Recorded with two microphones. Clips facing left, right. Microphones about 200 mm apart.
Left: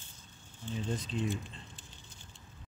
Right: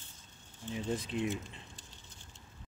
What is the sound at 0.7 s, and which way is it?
Speech, 10° right (ahead or behind).